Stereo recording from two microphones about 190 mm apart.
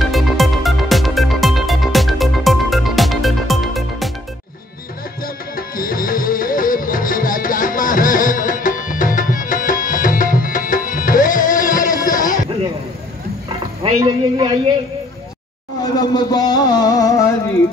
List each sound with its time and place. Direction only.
0.0 s music: centre (ahead or behind)
5.2 s music: 50° left (ahead or behind)
13.9 s music: 20° right (ahead or behind)
15.8 s a sound: 20° left (ahead or behind)